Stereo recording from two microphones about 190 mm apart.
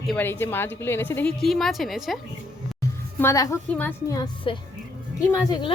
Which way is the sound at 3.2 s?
15° left (ahead or behind).